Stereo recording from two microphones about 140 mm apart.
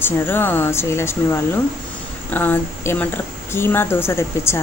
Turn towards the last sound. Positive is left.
turn(degrees=20)  # may be behind; listen again after turning